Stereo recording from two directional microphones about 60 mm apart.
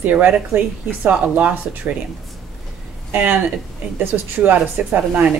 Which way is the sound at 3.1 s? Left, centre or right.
Right.